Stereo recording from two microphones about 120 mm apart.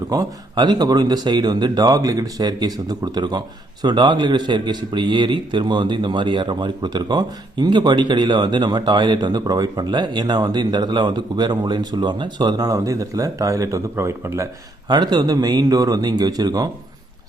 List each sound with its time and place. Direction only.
0.1 s a man's voice: 35° right (ahead or behind)
14.8 s a man's voice: 35° right (ahead or behind)